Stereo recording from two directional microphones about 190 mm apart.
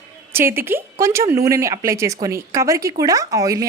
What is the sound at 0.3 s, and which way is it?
Speech, 10° right (ahead or behind).